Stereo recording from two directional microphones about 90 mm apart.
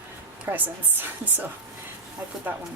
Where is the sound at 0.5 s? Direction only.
20° right (ahead or behind).